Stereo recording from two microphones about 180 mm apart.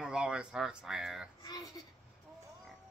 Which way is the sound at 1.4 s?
20° left (ahead or behind).